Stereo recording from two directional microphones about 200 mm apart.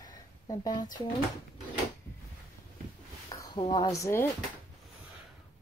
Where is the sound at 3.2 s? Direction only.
20° left (ahead or behind).